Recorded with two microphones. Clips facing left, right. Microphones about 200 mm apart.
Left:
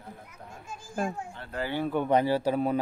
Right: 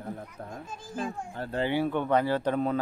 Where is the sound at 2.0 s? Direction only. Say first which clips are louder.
Left 1 dB; 15° left (ahead or behind).